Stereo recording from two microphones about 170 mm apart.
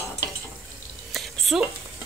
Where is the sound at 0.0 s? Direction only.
20° left (ahead or behind).